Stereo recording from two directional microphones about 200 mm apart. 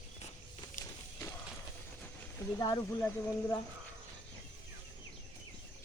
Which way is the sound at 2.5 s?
20° left (ahead or behind).